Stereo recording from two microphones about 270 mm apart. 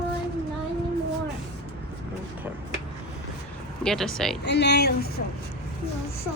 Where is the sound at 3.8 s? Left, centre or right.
Centre.